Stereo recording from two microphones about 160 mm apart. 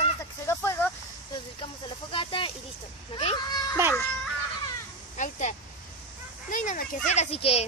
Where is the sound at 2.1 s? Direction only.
35° left (ahead or behind).